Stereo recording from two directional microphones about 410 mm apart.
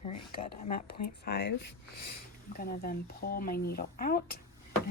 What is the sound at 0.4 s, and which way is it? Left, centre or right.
Speech, centre.